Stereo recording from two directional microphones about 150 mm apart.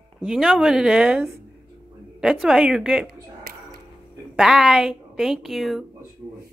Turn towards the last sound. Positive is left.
turn(degrees=0)  # may be behind; listen again after turning